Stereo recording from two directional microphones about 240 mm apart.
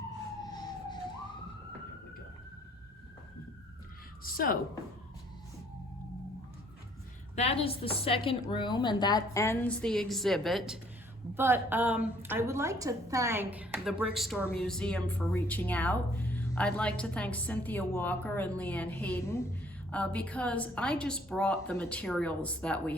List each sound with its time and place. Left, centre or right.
0.4 s fire engine: centre
4.2 s a woman's voice: left
7.3 s a woman's voice: left; by 23.0 s centre